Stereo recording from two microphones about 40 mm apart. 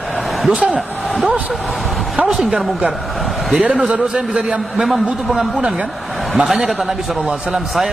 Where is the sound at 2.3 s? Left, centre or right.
Centre.